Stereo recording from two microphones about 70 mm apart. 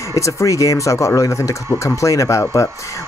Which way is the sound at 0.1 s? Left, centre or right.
Left.